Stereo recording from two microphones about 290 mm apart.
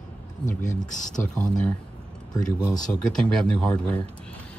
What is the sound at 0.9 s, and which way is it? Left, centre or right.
Speech, left.